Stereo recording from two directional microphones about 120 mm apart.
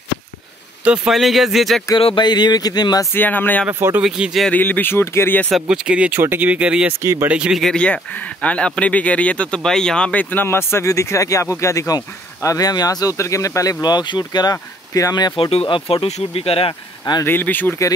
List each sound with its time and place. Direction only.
0.8 s speech: 5° right (ahead or behind)
2.0 s speech: 45° left (ahead or behind)
3.1 s speech: 15° left (ahead or behind)
3.6 s speech: 15° right (ahead or behind)
4.0 s speech: 5° right (ahead or behind)
4.5 s speech: 15° left (ahead or behind)
5.5 s speech: 5° right (ahead or behind)
7.0 s speech: 25° right (ahead or behind)
7.2 s speech: 10° right (ahead or behind)
7.6 s speech: 10° left (ahead or behind); by 15.3 s 30° left (ahead or behind)
15.3 s speech: 50° left (ahead or behind)
17.2 s speech: 15° left (ahead or behind)